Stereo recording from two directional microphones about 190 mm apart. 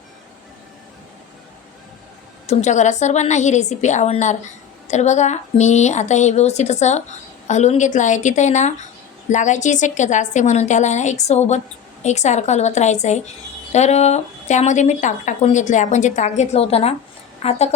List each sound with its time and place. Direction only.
2.5 s a woman's voice: 35° left (ahead or behind)